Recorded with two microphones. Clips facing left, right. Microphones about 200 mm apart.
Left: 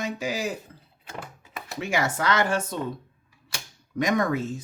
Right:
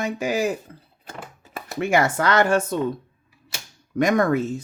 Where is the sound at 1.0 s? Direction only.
40° right (ahead or behind).